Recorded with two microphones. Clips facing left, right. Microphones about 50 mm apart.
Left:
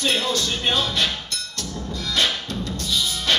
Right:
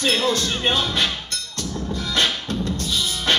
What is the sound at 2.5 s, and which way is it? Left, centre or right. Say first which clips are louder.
Music: right 2 dB; right.